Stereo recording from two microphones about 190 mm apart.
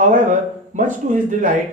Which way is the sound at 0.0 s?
40° right (ahead or behind).